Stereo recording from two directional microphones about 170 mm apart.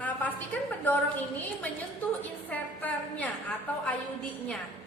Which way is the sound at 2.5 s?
10° left (ahead or behind).